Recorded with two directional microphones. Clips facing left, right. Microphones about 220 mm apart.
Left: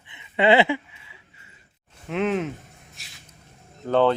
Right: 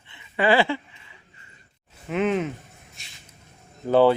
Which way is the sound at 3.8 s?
10° right (ahead or behind).